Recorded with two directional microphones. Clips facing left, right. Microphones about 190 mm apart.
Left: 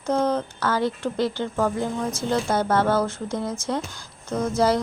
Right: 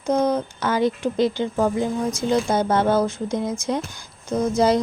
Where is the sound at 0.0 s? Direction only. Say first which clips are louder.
Right 2 dB; 15° right (ahead or behind).